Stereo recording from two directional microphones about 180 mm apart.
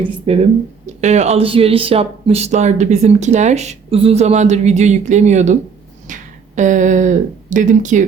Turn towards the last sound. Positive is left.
turn(degrees=-45)  # may be behind; listen again after turning